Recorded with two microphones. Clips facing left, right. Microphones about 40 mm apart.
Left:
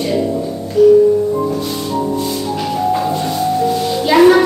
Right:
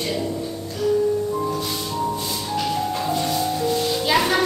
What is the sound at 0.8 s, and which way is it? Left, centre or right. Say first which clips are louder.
Music: left 14 dB; centre.